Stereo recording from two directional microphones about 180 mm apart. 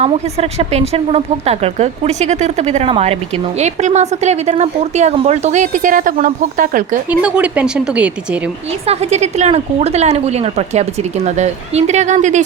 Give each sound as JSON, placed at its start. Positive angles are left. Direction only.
{"t": 0.0, "sound": "a woman's voice", "side_deg": -35}
{"t": 7.1, "sound": "speech", "side_deg": -5}
{"t": 8.9, "sound": "a woman's voice", "side_deg": -35}